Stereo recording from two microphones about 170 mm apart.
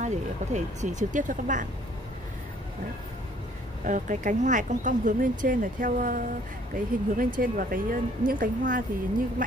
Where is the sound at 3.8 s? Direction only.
50° right (ahead or behind).